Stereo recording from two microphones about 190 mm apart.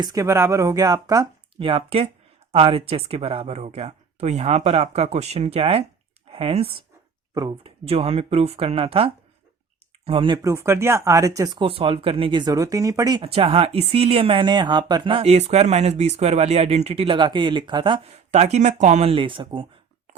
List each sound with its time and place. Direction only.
0.0 s speech: 20° right (ahead or behind)